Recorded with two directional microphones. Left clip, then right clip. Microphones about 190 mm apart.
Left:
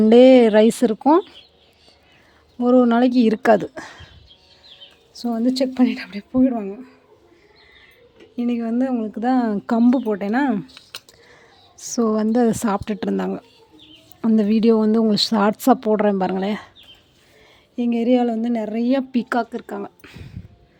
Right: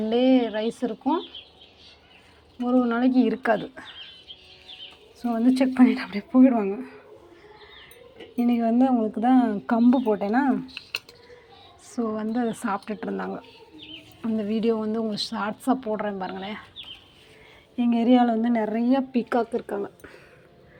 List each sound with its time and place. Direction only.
0.1 s speech: 60° left (ahead or behind)
2.8 s speech: 55° left (ahead or behind)
5.3 s a woman's voice: 30° left (ahead or behind); by 7.0 s 15° left (ahead or behind)
8.4 s a woman's voice: 15° left (ahead or behind); by 11.0 s 35° left (ahead or behind)
11.8 s speech: 60° left (ahead or behind)
12.5 s speech: 45° left (ahead or behind)
17.7 s a woman's voice: 30° left (ahead or behind)